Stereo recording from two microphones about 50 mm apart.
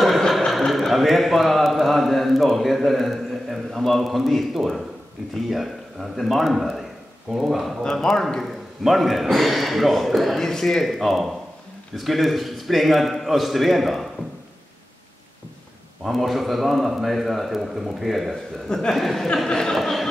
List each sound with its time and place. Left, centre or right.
0.0 s a sound: centre
0.5 s speech: centre
7.8 s a man's voice: centre
16.1 s speech: centre
18.3 s a man's voice: centre
18.9 s a man's voice: centre
19.8 s speech: centre